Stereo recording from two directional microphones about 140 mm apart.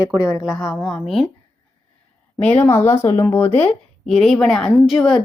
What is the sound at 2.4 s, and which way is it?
Speech, 10° left (ahead or behind).